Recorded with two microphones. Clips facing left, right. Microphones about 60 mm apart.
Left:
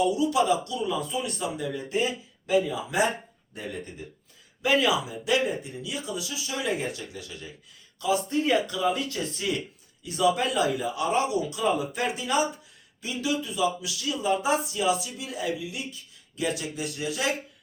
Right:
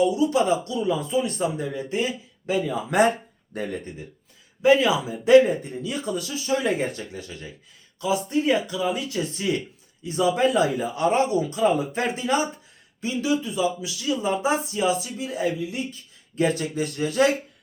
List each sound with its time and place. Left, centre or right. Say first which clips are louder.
0.0 s speech: right 3 dB; right
2.5 s speech: right 1 dB; right
4.6 s speech: right 5 dB; right
8.0 s speech: right 2 dB; right